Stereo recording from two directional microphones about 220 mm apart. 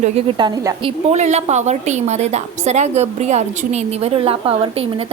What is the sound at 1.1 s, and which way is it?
Speech, 30° right (ahead or behind).